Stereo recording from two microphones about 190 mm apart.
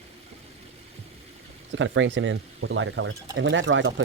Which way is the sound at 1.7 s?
85° right.